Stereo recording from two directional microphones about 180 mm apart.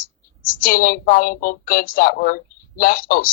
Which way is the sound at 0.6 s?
50° left (ahead or behind).